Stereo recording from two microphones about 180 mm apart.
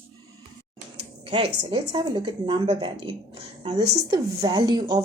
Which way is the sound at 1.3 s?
30° right (ahead or behind).